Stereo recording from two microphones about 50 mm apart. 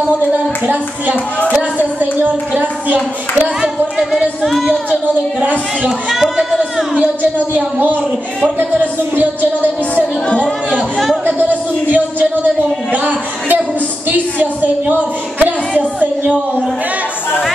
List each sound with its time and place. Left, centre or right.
1.5 s a man's voice: right
5.9 s speech: centre
7.5 s a man's voice: right
9.6 s speech: left
11.2 s a man's voice: right